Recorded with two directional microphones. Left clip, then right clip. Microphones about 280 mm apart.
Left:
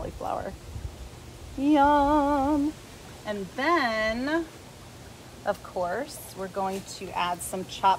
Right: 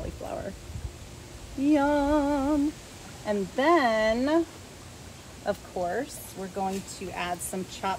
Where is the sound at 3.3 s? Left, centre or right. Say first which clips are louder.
Right 3 dB; centre.